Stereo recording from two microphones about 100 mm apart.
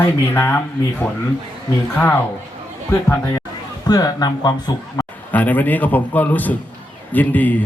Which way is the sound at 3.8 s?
40° left (ahead or behind).